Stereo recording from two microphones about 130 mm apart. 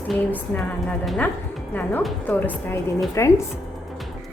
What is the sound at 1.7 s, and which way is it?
Speech, 15° left (ahead or behind).